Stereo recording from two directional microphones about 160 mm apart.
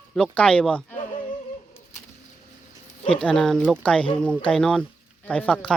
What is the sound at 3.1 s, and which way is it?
Speech, 5° left (ahead or behind).